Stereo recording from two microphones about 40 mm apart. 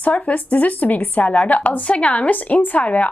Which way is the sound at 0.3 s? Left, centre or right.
Left.